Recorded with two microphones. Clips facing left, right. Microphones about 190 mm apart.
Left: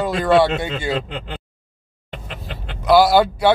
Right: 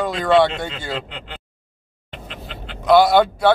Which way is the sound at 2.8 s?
Centre (ahead or behind).